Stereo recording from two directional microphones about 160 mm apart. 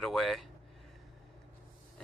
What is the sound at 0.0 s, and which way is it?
Speech, centre (ahead or behind).